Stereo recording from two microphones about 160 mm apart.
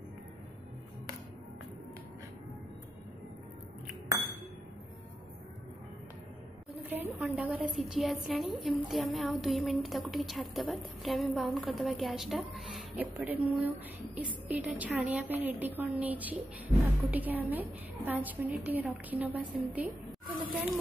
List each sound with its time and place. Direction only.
7.2 s a woman's voice: 5° right (ahead or behind)